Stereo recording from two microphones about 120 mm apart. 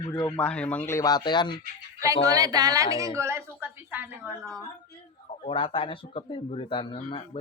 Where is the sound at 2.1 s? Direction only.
30° right (ahead or behind); by 4.4 s 15° right (ahead or behind).